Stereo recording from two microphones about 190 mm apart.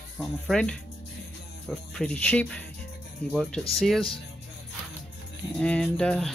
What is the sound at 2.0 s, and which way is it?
Speech, 5° left (ahead or behind).